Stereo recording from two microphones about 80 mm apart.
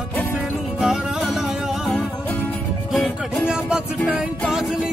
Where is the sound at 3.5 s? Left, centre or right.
Centre.